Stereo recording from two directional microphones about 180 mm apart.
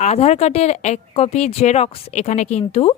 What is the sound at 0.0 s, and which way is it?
A woman's voice, 35° left (ahead or behind).